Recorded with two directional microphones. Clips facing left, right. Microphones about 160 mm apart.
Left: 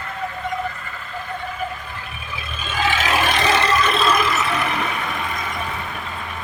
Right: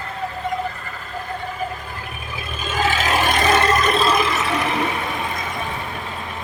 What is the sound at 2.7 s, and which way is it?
Vehicle, 40° right (ahead or behind).